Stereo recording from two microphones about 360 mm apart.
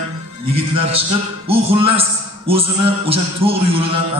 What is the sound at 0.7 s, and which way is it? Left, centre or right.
A man's voice, centre.